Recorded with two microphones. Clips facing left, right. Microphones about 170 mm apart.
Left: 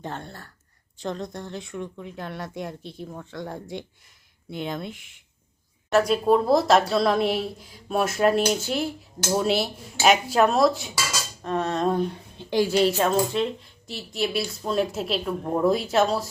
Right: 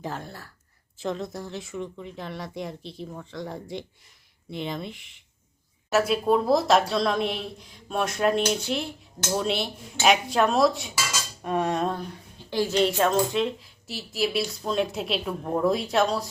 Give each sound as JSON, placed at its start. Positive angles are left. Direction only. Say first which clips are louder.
{"t": 0.0, "sound": "speech", "louder": "right 1 dB", "side_deg": 0}
{"t": 11.4, "sound": "a sound", "louder": "even", "side_deg": -10}
{"t": 12.5, "sound": "a woman's voice", "louder": "left 3 dB", "side_deg": 15}
{"t": 12.8, "sound": "speech", "louder": "left 1 dB", "side_deg": 0}